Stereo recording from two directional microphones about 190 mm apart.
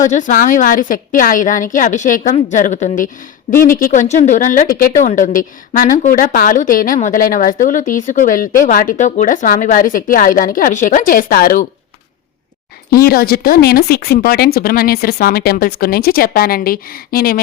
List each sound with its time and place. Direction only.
0.1 s speech: 40° left (ahead or behind)
12.9 s speech: 50° left (ahead or behind)